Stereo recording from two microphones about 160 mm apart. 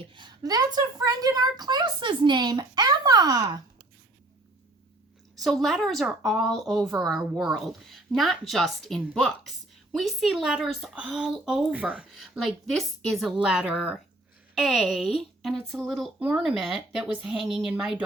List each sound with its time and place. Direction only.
0.0 s a woman's voice: 30° right (ahead or behind)
5.4 s a woman's voice: centre (ahead or behind)